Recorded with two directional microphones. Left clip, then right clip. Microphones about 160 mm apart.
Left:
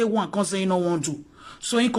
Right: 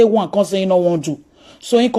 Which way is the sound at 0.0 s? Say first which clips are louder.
Right 11 dB; 20° right (ahead or behind).